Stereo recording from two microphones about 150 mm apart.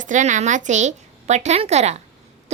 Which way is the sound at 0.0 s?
55° right (ahead or behind).